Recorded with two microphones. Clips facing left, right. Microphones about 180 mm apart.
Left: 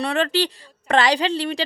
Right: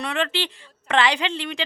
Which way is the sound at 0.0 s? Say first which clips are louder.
Left 5 dB; 35° left (ahead or behind).